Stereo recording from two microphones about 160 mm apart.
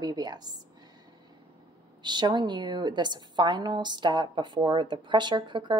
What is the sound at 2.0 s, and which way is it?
A woman's voice, 30° right (ahead or behind).